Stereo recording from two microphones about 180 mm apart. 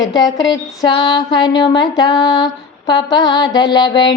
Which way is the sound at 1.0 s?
25° left (ahead or behind).